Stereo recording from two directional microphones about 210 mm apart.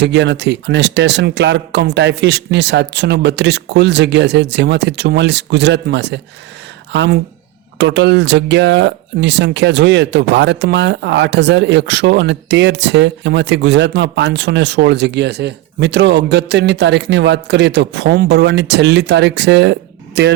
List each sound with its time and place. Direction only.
0.0 s speech: 55° right (ahead or behind)